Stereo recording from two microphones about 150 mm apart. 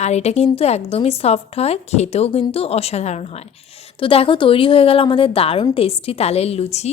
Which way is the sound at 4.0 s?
35° left (ahead or behind).